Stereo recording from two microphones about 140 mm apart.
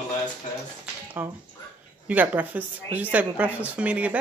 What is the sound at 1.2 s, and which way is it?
Speech, 15° right (ahead or behind).